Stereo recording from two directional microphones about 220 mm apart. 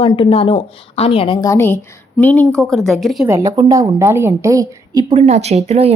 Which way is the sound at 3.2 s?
15° right (ahead or behind).